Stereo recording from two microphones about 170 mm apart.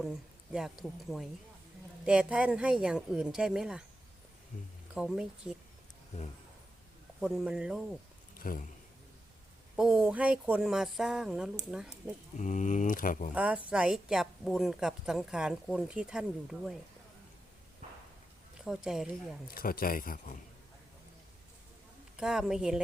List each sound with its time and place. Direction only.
0.0 s a woman's voice: centre (ahead or behind)
4.9 s a woman's voice: 5° right (ahead or behind)
7.2 s a woman's voice: 5° right (ahead or behind)
8.4 s speech: 55° left (ahead or behind)
9.7 s a woman's voice: 5° right (ahead or behind)
12.4 s speech: 45° left (ahead or behind)
13.3 s a woman's voice: 10° right (ahead or behind)
17.8 s a sound: 40° right (ahead or behind)
18.6 s a woman's voice: 5° right (ahead or behind)
19.5 s speech: 60° left (ahead or behind)
22.2 s a woman's voice: 5° right (ahead or behind)